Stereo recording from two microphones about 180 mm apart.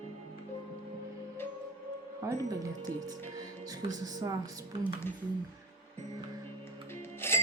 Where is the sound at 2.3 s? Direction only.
20° right (ahead or behind).